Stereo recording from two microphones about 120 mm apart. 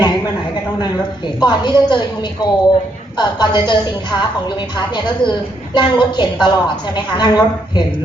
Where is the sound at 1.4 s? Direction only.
40° left (ahead or behind).